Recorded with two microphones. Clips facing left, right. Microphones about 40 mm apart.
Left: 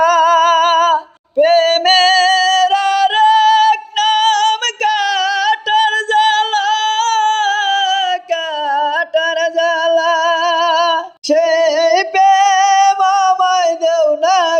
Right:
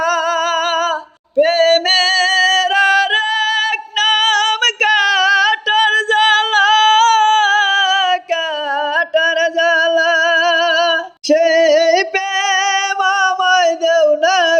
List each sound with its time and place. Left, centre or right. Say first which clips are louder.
0.0 s music: left 6 dB; centre
1.4 s male singing: left 1 dB; centre
2.4 s female singing: even; right
6.6 s singing: right 4 dB; right
8.7 s music: left 1 dB; right